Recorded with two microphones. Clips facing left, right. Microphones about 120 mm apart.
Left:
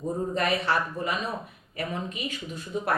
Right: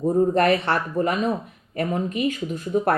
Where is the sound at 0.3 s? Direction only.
60° right (ahead or behind).